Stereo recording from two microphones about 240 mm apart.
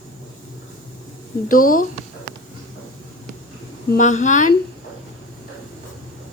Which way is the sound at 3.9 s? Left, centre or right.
Left.